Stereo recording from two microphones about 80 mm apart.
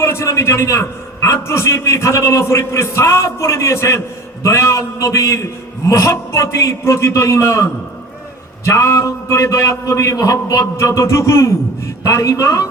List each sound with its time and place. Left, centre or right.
0.0 s a man's voice: left